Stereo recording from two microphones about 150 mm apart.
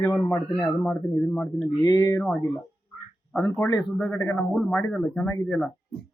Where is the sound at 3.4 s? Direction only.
20° left (ahead or behind).